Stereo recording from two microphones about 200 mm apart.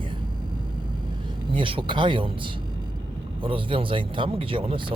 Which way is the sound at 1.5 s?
25° right (ahead or behind).